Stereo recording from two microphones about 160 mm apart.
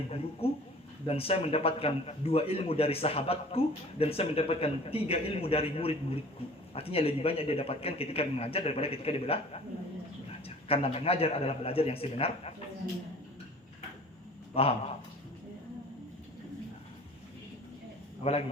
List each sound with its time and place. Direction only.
0.1 s a man's voice: 35° left (ahead or behind)
10.7 s a man's voice: 40° left (ahead or behind)
14.5 s a man's voice: 35° left (ahead or behind)
18.2 s a man's voice: 40° left (ahead or behind)